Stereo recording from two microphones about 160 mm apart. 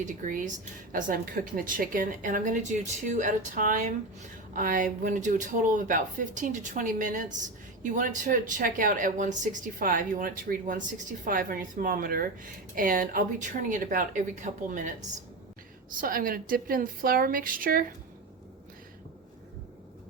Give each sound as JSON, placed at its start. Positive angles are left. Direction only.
{"t": 0.0, "sound": "speech", "side_deg": -55}